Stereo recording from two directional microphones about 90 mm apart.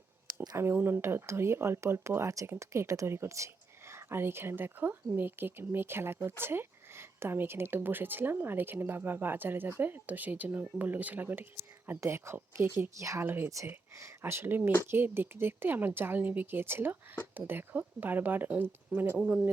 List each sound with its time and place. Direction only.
0.5 s a woman's voice: 25° right (ahead or behind)